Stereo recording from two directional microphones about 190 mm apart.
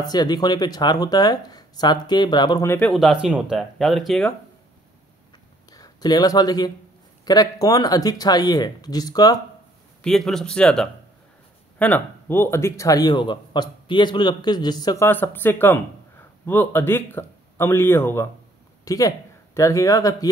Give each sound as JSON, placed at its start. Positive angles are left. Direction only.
{"t": 0.0, "sound": "speech", "side_deg": 20}
{"t": 2.7, "sound": "speech", "side_deg": 5}
{"t": 5.7, "sound": "speech", "side_deg": 20}
{"t": 10.0, "sound": "a man's voice", "side_deg": 0}